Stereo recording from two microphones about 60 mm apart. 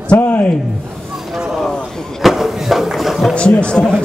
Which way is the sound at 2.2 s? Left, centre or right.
Centre.